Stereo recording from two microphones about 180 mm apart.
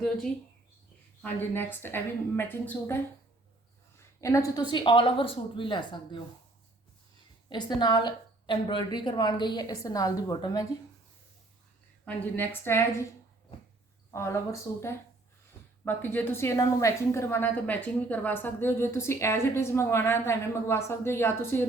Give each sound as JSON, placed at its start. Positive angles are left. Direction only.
{"t": 1.2, "sound": "a woman's voice", "side_deg": 10}
{"t": 4.2, "sound": "a woman's voice", "side_deg": 15}
{"t": 7.5, "sound": "a woman's voice", "side_deg": 25}
{"t": 12.0, "sound": "a woman's voice", "side_deg": 10}
{"t": 14.1, "sound": "a woman's voice", "side_deg": 15}